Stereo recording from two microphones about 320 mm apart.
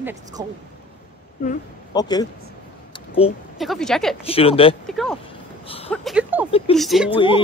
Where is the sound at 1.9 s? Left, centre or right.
Centre.